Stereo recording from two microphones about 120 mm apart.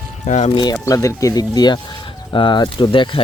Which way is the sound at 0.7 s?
25° left (ahead or behind).